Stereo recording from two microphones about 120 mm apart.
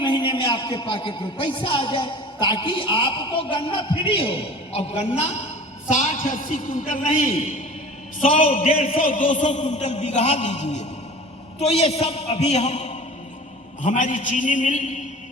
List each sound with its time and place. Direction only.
0.0 s a man's voice: 45° left (ahead or behind); by 5.4 s 65° left (ahead or behind)
5.9 s a man's voice: 90° left; by 13.0 s 70° left (ahead or behind)
13.8 s a man's voice: 90° left